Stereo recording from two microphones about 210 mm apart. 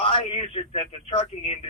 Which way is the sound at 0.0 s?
25° left (ahead or behind).